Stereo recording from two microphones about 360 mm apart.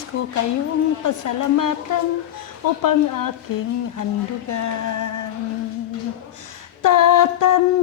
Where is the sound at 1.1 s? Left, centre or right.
Left.